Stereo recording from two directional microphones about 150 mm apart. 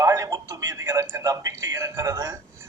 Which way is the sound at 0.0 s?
20° right (ahead or behind).